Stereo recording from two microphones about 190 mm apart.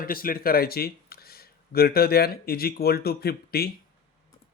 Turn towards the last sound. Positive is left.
turn(degrees=55)  # may be behind; listen again after turning